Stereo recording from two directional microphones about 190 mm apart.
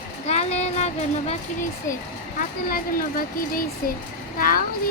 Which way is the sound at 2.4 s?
50° left (ahead or behind).